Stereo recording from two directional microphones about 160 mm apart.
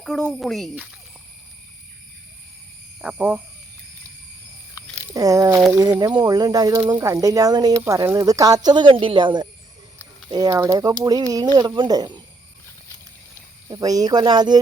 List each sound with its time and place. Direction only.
0.0 s speech: centre (ahead or behind)
3.0 s speech: 5° right (ahead or behind)
5.1 s speech: 20° right (ahead or behind)
13.7 s speech: 25° right (ahead or behind)